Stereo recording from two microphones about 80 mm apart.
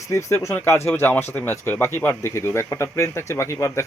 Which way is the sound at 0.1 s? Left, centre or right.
Left.